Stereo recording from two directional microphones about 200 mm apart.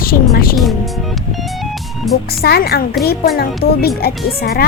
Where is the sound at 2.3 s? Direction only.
50° left (ahead or behind).